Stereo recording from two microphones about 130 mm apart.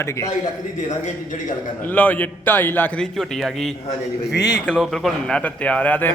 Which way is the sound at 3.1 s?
Centre (ahead or behind).